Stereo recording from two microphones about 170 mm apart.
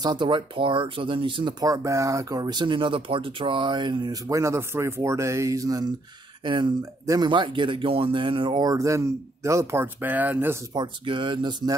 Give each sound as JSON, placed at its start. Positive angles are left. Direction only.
{"t": 0.0, "sound": "speech", "side_deg": -30}
{"t": 10.7, "sound": "speech", "side_deg": -25}